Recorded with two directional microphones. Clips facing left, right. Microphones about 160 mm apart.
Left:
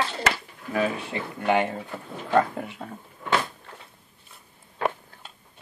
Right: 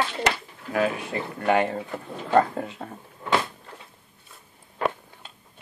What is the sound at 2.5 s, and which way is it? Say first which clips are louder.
Speech: right 2 dB; 30° right (ahead or behind).